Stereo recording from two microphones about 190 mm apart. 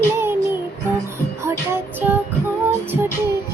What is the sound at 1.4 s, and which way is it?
Child singing, 10° right (ahead or behind).